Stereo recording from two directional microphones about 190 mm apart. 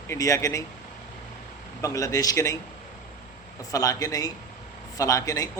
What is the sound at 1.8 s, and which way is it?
Speech, 15° left (ahead or behind).